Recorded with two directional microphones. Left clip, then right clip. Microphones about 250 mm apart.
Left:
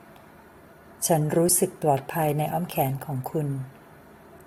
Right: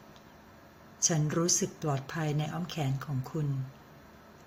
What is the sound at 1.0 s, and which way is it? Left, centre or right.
A woman's voice, centre.